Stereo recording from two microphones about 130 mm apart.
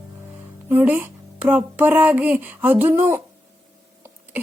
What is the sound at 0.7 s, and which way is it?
Music, 15° right (ahead or behind).